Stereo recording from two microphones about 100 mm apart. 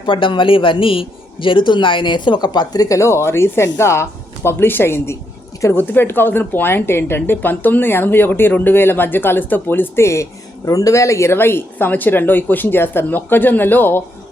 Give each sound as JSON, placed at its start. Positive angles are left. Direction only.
{"t": 0.0, "sound": "a man's voice", "side_deg": 55}